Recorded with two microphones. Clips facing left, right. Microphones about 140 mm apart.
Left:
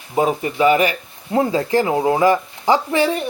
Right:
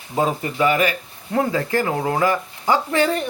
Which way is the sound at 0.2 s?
15° left (ahead or behind).